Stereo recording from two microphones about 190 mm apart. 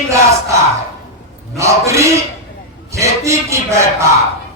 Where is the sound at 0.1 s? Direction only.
15° right (ahead or behind).